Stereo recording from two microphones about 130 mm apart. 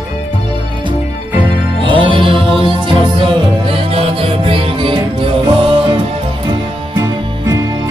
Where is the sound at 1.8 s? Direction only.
40° right (ahead or behind).